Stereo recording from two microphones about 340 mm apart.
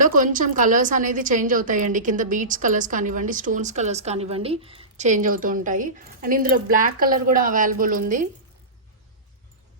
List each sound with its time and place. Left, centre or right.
0.0 s a woman's voice: right